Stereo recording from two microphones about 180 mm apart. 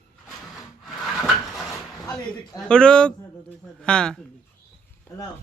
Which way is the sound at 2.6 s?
5° left (ahead or behind).